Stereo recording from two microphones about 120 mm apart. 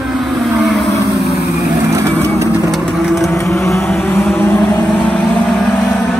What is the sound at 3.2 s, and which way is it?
Vehicle, 25° left (ahead or behind).